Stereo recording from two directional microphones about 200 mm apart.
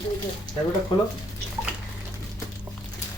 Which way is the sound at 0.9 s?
25° left (ahead or behind).